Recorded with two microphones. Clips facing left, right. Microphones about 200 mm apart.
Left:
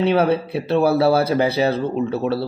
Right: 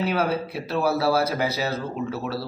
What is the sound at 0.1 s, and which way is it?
Speech, 30° left (ahead or behind).